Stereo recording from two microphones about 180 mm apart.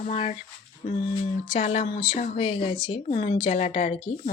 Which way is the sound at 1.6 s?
40° left (ahead or behind).